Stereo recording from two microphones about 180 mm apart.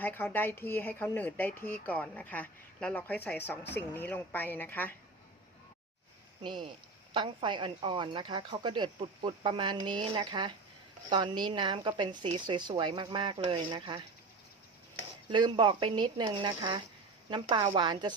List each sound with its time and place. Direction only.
0.0 s speech: 10° left (ahead or behind)
6.4 s a woman's voice: 25° right (ahead or behind)
15.3 s a woman's voice: 25° right (ahead or behind)